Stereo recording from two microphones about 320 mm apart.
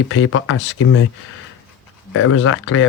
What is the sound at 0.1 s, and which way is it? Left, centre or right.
Speech, left.